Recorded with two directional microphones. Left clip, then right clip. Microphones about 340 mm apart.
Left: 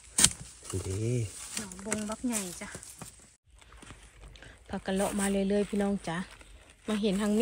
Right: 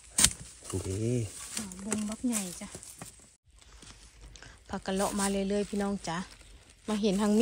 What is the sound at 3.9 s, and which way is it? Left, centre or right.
Speech, centre.